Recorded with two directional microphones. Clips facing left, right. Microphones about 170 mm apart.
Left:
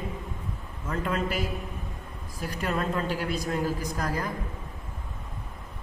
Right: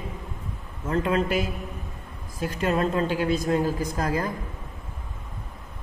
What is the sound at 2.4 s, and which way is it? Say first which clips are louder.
A woman's voice: right 5 dB; 20° right (ahead or behind).